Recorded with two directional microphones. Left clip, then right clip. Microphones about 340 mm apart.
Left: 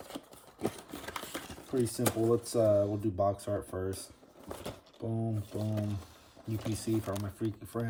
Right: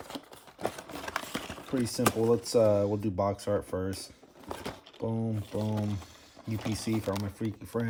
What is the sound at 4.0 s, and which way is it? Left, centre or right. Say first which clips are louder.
Speech: right 4 dB; centre.